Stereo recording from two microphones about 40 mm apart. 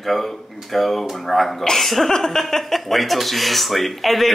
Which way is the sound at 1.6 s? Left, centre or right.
Centre.